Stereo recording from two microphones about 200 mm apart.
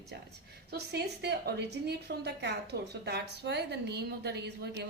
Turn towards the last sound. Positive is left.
turn(degrees=-55)  # may be behind; listen again after turning